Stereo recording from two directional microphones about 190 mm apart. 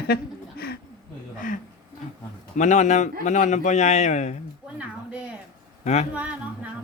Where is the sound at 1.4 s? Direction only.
45° left (ahead or behind).